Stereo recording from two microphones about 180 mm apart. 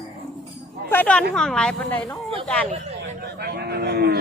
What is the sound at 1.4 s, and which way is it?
Speech, 5° left (ahead or behind).